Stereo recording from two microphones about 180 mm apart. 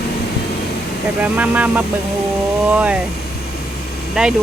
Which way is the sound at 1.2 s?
10° right (ahead or behind).